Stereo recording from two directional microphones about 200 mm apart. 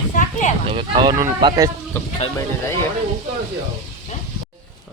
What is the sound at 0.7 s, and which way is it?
Speech, 25° right (ahead or behind).